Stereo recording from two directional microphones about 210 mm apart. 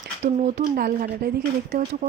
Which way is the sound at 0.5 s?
45° right (ahead or behind).